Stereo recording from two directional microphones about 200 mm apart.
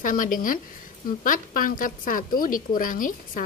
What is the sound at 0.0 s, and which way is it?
A woman's voice, 40° left (ahead or behind).